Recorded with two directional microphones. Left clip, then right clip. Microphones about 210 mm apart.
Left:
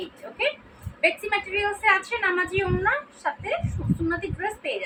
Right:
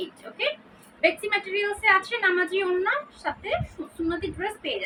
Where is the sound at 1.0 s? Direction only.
10° right (ahead or behind).